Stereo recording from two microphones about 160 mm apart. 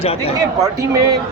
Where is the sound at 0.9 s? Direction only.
20° right (ahead or behind).